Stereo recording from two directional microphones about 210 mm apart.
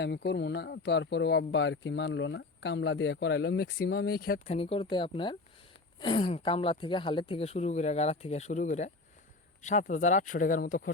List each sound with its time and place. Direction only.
0.0 s speech: 55° left (ahead or behind)
4.4 s speech: 30° left (ahead or behind)